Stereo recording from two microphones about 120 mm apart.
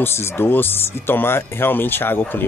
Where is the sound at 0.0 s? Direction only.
20° left (ahead or behind).